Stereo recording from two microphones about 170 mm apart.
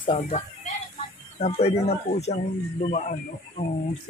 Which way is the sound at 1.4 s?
35° left (ahead or behind).